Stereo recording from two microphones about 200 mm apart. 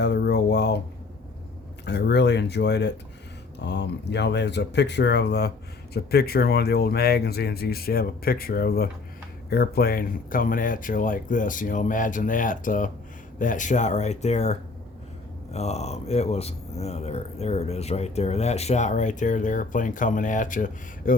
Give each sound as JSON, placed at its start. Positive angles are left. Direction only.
{"t": 0.0, "sound": "speech", "side_deg": 60}
{"t": 1.8, "sound": "speech", "side_deg": 60}